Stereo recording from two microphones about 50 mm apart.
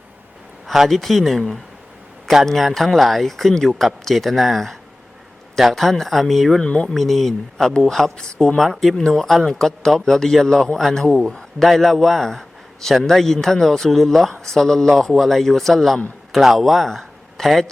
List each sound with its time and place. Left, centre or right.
0.7 s a man's voice: centre
6.6 s a man's voice: centre
11.6 s a man's voice: centre